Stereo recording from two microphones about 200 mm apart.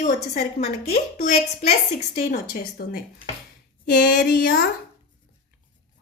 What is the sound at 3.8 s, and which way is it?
Speech, 55° left (ahead or behind).